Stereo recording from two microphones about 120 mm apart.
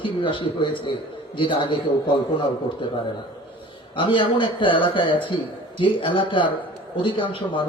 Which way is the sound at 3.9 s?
45° left (ahead or behind).